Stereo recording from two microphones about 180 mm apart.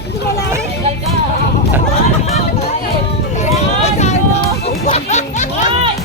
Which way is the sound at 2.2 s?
35° left (ahead or behind).